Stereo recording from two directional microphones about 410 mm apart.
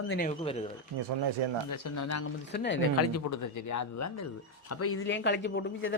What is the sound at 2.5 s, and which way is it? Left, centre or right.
A man's voice, left.